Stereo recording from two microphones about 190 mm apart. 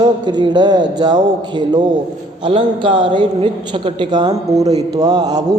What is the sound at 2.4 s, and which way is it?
A woman's voice, 25° right (ahead or behind).